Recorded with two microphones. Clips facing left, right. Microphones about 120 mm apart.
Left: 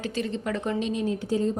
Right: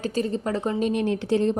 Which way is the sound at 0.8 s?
65° right (ahead or behind).